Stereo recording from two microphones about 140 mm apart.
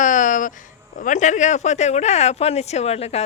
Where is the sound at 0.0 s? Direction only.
65° left (ahead or behind).